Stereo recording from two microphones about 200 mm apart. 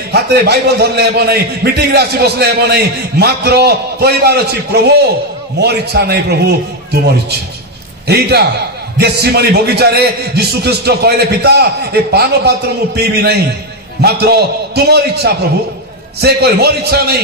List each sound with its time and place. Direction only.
0.1 s a man's voice: 55° right (ahead or behind)
8.1 s a man's voice: 55° right (ahead or behind)